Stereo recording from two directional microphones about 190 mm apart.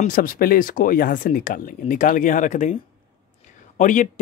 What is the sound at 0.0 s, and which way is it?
Speech, 45° left (ahead or behind).